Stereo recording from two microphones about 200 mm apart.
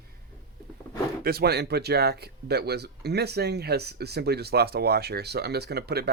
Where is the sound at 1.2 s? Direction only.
50° right (ahead or behind).